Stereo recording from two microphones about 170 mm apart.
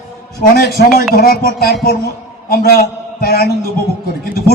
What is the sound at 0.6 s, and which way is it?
Speech, 60° left (ahead or behind).